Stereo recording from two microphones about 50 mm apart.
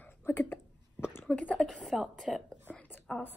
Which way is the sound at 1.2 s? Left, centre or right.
Left.